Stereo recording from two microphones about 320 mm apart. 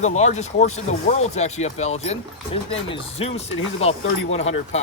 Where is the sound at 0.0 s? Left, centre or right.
Left.